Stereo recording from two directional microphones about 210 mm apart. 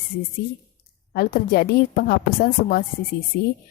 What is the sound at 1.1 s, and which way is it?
A woman's voice, 45° left (ahead or behind).